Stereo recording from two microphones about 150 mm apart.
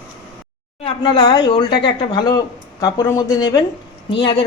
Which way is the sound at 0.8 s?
30° left (ahead or behind).